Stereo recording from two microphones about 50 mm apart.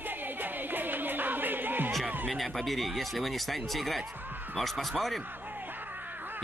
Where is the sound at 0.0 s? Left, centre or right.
Right.